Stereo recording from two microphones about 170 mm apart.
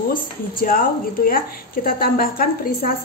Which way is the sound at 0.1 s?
60° left (ahead or behind).